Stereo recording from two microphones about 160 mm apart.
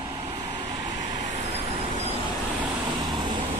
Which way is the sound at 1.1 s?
50° right (ahead or behind).